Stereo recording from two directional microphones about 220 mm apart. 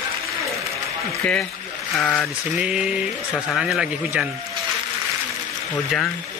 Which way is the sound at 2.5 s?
5° right (ahead or behind).